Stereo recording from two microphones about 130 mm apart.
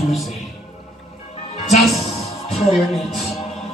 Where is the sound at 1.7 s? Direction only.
60° left (ahead or behind).